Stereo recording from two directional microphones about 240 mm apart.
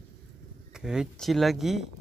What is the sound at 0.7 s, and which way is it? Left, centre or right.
Speech, centre.